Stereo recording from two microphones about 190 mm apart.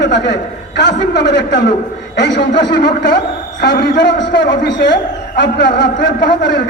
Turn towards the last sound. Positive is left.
turn(degrees=65)  # may be behind; listen again after turning